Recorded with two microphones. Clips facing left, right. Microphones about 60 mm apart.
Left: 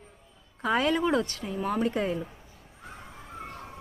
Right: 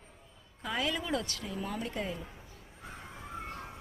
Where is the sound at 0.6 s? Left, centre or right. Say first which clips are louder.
Left 9 dB; left.